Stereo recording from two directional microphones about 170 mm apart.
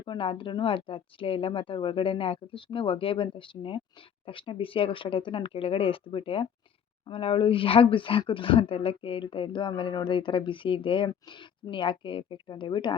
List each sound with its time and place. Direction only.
0.0 s speech: 30° left (ahead or behind)